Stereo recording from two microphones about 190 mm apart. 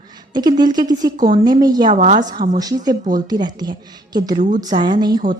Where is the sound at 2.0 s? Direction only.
40° right (ahead or behind).